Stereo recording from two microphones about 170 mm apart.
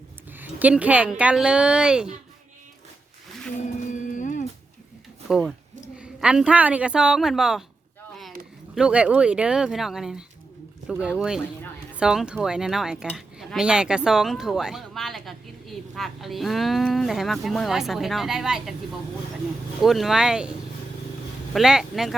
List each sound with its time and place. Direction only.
0.3 s speech: 10° right (ahead or behind)
4.1 s a sound: 45° left (ahead or behind)
5.3 s speech: 5° right (ahead or behind)
8.7 s speech: 5° right (ahead or behind)
19.8 s speech: centre (ahead or behind)
21.5 s speech: 5° right (ahead or behind)